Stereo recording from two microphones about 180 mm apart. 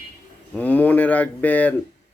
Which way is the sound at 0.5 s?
10° left (ahead or behind).